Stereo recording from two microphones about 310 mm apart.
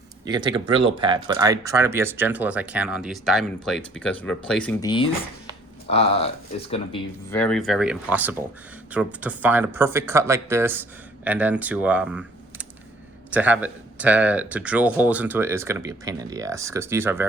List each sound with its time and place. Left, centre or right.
0.3 s speech: centre
5.9 s speech: centre
7.3 s speech: centre
13.3 s speech: centre